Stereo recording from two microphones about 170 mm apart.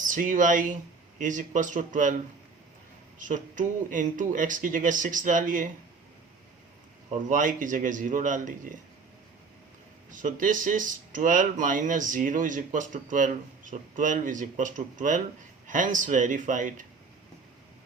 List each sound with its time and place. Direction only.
0.0 s speech: 50° right (ahead or behind)
3.2 s speech: 50° right (ahead or behind)
7.1 s speech: 50° right (ahead or behind)
10.1 s speech: 50° right (ahead or behind)